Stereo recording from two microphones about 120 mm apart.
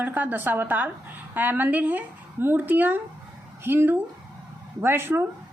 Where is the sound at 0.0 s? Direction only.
15° right (ahead or behind).